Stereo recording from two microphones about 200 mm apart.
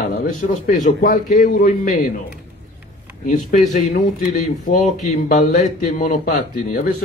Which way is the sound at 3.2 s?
40° left (ahead or behind).